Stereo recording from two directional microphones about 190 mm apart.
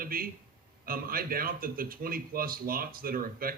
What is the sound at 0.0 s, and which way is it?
Speech, 50° right (ahead or behind).